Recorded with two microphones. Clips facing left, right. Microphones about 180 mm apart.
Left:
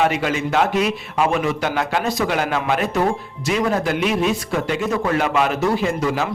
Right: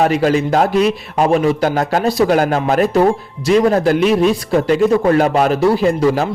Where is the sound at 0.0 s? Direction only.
40° right (ahead or behind).